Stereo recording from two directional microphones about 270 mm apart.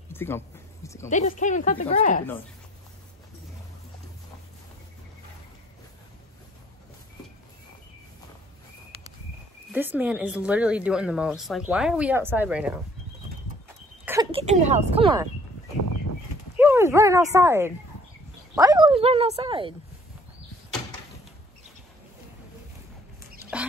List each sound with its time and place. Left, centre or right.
0.1 s a sound: centre
1.0 s speech: left
9.7 s speech: centre
14.3 s speech: right
16.5 s speech: centre